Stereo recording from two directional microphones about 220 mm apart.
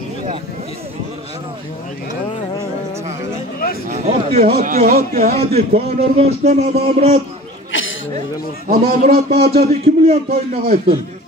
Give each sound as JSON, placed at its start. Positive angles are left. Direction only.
{"t": 3.9, "sound": "a man's voice", "side_deg": -30}
{"t": 7.7, "sound": "a sound", "side_deg": 60}
{"t": 8.6, "sound": "a man's voice", "side_deg": -30}